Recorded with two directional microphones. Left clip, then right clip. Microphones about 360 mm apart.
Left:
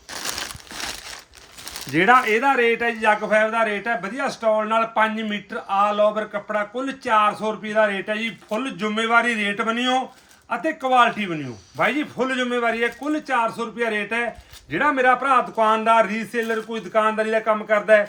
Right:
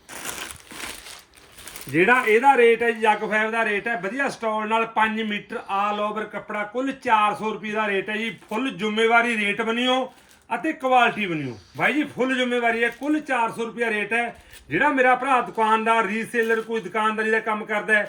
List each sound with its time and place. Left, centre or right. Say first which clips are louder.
0.1 s crumpling: left 4 dB; centre
1.9 s a man's voice: left 1 dB; centre